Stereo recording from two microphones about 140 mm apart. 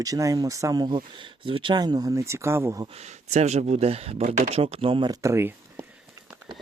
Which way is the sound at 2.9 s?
55° right (ahead or behind).